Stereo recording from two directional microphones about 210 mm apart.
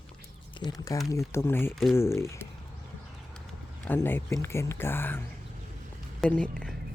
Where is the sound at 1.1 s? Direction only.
15° left (ahead or behind).